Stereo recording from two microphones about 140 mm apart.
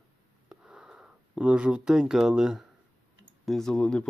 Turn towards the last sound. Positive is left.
turn(degrees=5)  # may be behind; listen again after turning